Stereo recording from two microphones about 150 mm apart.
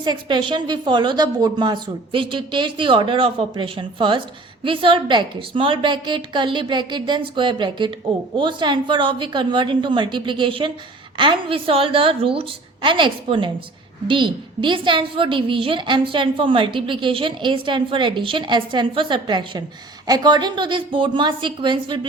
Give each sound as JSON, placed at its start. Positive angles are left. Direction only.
{"t": 0.0, "sound": "a woman's voice", "side_deg": -30}